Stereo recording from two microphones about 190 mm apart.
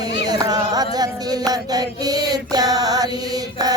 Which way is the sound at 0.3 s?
20° right (ahead or behind).